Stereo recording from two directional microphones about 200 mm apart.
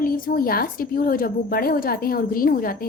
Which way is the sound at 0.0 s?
45° left (ahead or behind).